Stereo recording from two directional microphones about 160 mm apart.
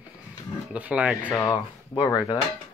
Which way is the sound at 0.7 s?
10° right (ahead or behind).